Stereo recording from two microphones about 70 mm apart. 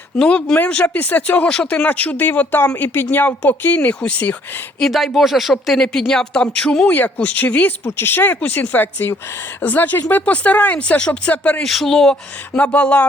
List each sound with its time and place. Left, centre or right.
0.2 s speech: centre
0.5 s speech: left
4.8 s speech: centre
6.8 s speech: left
11.6 s speech: centre
12.5 s speech: centre